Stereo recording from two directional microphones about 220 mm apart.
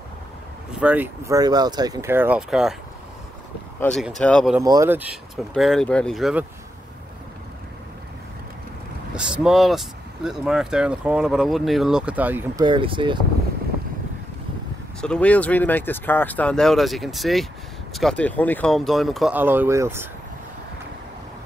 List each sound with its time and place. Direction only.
0.7 s speech: 5° right (ahead or behind)
3.8 s speech: centre (ahead or behind)
4.6 s speech: 15° right (ahead or behind)
9.1 s speech: 5° right (ahead or behind)
12.6 s speech: 20° right (ahead or behind)
15.0 s speech: 5° left (ahead or behind); by 20.1 s 10° right (ahead or behind)